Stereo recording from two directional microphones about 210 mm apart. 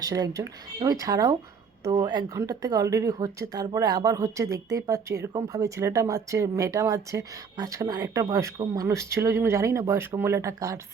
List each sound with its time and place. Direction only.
0.0 s a woman's voice: 15° right (ahead or behind)